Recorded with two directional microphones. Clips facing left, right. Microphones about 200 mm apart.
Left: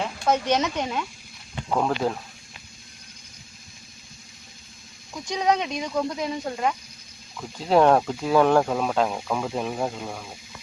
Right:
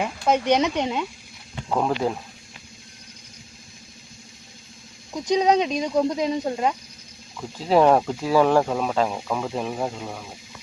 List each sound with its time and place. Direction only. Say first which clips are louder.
0.0 s speech: right 2 dB; 15° right (ahead or behind)
1.7 s speech: right 1 dB; 5° right (ahead or behind)
5.3 s speech: right 5 dB; 20° right (ahead or behind)
7.3 s speech: right 1 dB; 5° right (ahead or behind)